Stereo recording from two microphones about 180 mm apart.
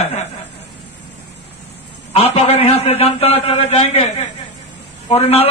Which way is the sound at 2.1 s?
35° left (ahead or behind).